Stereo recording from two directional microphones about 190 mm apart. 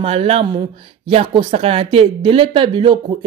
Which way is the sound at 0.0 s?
30° right (ahead or behind).